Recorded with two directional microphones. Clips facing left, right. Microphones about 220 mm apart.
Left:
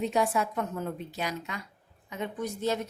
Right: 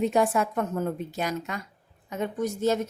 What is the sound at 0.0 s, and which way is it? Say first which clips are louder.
A woman's voice: right 4 dB; 50° right (ahead or behind).